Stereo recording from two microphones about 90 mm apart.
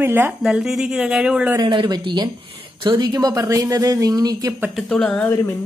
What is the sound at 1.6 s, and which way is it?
Speech, 55° right (ahead or behind).